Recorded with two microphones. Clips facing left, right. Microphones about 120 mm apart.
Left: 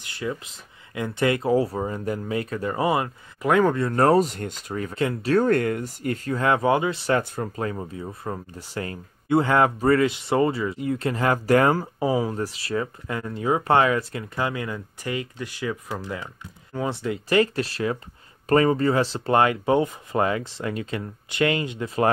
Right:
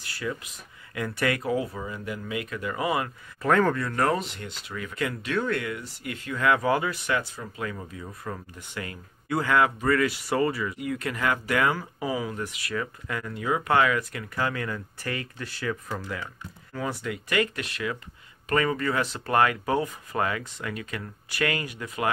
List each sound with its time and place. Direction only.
0.0 s a sound: 25° left (ahead or behind)
0.9 s speech: 25° left (ahead or behind)
3.4 s speech: 15° left (ahead or behind)
3.7 s speech: 30° left (ahead or behind)
7.1 s speech: 50° left (ahead or behind)
7.5 s speech: 30° left (ahead or behind)